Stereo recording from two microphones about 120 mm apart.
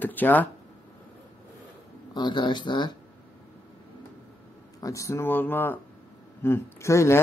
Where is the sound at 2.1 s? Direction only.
40° left (ahead or behind).